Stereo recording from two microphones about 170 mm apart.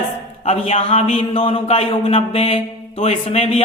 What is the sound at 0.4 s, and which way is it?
Speech, 40° left (ahead or behind).